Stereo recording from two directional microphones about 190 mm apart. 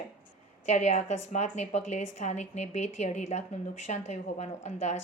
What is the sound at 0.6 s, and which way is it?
A woman's voice, 35° left (ahead or behind).